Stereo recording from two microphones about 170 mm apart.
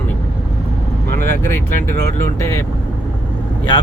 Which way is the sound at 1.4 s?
15° left (ahead or behind).